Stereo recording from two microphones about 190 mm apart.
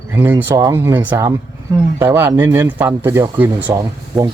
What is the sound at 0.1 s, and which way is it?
Speech, 10° right (ahead or behind).